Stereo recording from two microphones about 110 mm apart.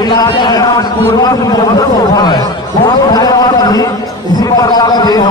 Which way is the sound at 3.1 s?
35° left (ahead or behind).